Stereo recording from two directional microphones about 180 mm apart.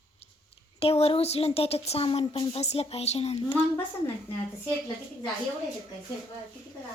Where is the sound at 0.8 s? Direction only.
35° left (ahead or behind).